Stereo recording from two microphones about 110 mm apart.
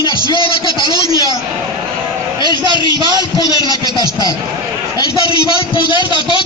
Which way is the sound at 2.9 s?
40° right (ahead or behind).